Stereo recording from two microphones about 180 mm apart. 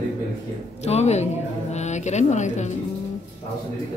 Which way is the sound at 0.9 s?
35° left (ahead or behind).